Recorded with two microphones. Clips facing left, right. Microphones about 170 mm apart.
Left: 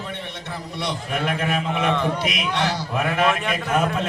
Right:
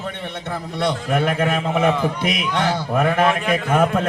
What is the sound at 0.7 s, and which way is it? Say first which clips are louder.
A man's voice: right 7 dB; 50° right (ahead or behind).